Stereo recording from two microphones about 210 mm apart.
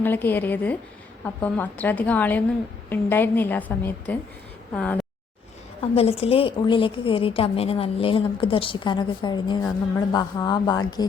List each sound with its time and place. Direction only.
0.0 s a woman's voice: 10° left (ahead or behind)
5.8 s a woman's voice: 30° left (ahead or behind)